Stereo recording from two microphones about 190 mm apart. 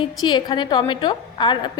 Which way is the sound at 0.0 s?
25° left (ahead or behind).